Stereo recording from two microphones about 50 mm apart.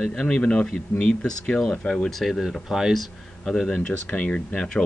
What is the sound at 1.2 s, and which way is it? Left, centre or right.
Speech, centre.